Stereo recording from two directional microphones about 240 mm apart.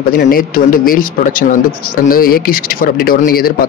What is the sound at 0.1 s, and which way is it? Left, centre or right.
Speech, left.